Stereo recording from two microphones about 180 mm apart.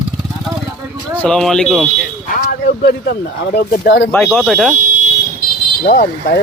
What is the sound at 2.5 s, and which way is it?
Speech, 60° left (ahead or behind).